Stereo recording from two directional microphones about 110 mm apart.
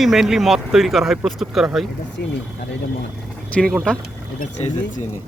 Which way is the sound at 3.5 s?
5° left (ahead or behind).